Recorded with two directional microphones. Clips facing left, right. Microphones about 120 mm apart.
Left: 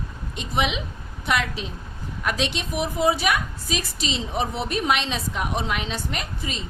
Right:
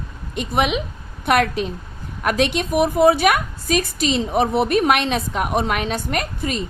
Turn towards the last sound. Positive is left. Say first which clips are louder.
# right 8 dB
turn(degrees=-55)  # may be behind; listen again after turning